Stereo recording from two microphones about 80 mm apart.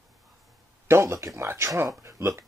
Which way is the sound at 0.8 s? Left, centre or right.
Right.